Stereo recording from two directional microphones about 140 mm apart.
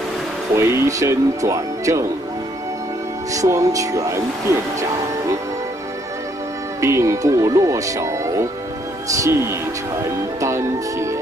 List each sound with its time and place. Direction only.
0.6 s speech: 20° right (ahead or behind)
3.3 s speech: 25° right (ahead or behind)
6.8 s speech: 20° right (ahead or behind)
10.4 s music: 20° right (ahead or behind)